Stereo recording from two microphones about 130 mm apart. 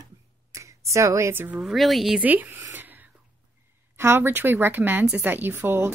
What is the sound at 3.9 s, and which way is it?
Speech, 20° right (ahead or behind).